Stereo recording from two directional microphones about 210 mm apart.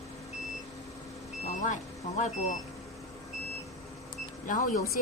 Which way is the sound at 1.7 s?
35° left (ahead or behind).